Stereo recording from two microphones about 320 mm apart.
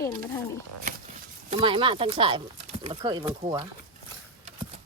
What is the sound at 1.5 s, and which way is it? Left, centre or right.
Speech, centre.